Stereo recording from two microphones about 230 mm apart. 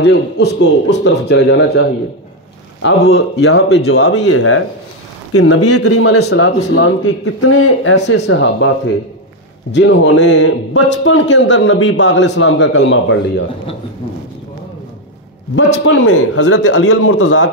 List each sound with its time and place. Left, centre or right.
0.0 s a man's voice: left
3.9 s speech: left
6.2 s a man's voice: left
9.7 s a man's voice: left
15.8 s a man's voice: left